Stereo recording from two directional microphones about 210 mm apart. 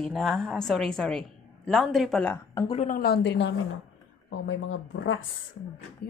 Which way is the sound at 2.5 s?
25° left (ahead or behind).